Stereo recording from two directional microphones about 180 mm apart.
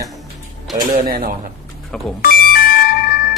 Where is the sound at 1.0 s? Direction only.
55° right (ahead or behind).